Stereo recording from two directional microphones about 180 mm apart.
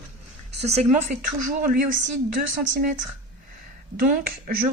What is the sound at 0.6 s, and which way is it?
Speech, 40° right (ahead or behind).